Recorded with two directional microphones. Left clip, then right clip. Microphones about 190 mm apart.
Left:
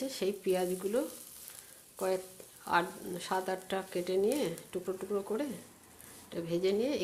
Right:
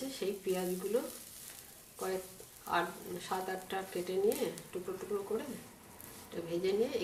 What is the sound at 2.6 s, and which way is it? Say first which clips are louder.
Speech: left 3 dB; 60° left (ahead or behind).